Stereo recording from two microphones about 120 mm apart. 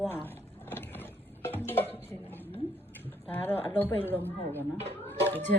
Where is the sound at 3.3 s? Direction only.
15° left (ahead or behind).